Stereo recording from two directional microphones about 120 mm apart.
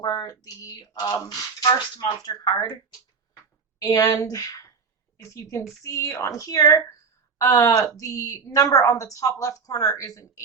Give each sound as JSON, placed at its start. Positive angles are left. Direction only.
{"t": 0.0, "sound": "speech", "side_deg": 35}
{"t": 3.8, "sound": "a woman's voice", "side_deg": 30}